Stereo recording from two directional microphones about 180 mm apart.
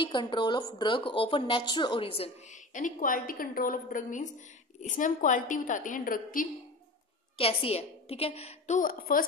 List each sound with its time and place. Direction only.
0.0 s a woman's voice: 25° left (ahead or behind); by 6.4 s 50° left (ahead or behind)
7.3 s a woman's voice: 30° left (ahead or behind); by 9.2 s 50° left (ahead or behind)